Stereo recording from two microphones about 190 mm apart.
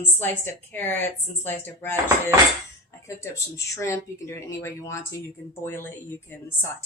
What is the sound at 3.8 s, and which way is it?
Speech, 15° left (ahead or behind).